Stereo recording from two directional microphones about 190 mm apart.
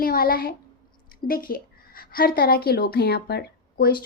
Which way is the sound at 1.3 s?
50° left (ahead or behind).